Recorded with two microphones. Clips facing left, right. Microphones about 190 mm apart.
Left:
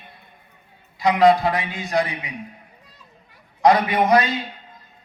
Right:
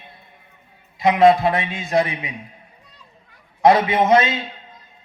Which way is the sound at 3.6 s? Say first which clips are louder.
Right 2 dB; 25° right (ahead or behind).